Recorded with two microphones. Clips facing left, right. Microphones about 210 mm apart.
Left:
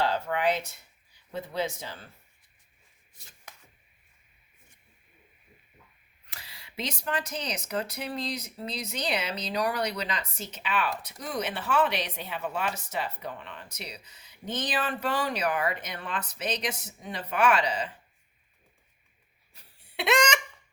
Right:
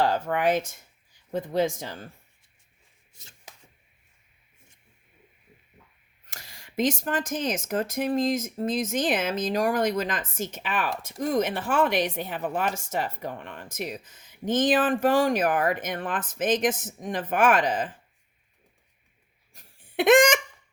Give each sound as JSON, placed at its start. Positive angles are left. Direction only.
{"t": 0.0, "sound": "speech", "side_deg": -45}
{"t": 6.3, "sound": "speech", "side_deg": -45}
{"t": 19.5, "sound": "squeak", "side_deg": -50}